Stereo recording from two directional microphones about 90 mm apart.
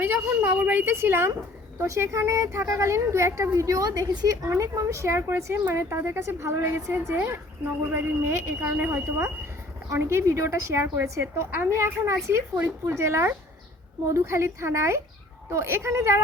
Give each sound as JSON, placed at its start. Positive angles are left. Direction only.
{"t": 0.0, "sound": "a woman's voice", "side_deg": -20}
{"t": 4.4, "sound": "a woman's voice", "side_deg": -35}